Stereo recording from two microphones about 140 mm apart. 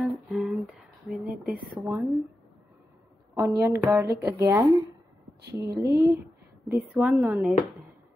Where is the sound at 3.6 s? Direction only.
20° right (ahead or behind).